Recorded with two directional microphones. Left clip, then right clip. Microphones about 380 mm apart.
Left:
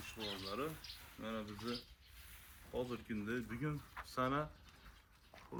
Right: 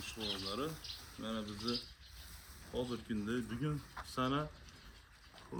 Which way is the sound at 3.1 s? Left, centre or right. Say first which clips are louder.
Right 3 dB; centre.